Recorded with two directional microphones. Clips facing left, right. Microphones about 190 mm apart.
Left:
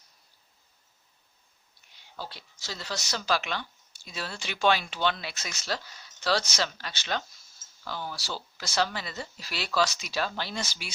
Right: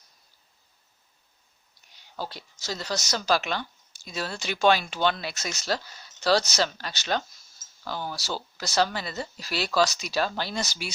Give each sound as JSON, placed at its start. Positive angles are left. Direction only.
{"t": 2.1, "sound": "speech", "side_deg": -40}